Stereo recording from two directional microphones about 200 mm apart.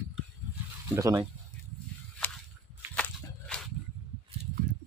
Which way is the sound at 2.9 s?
5° left (ahead or behind).